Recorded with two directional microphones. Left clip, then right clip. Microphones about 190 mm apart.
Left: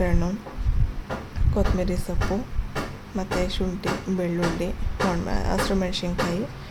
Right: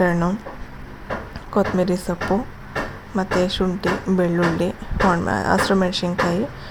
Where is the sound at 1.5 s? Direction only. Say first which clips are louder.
Right 7 dB; 20° right (ahead or behind).